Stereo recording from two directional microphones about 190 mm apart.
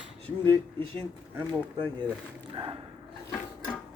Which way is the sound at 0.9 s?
20° right (ahead or behind).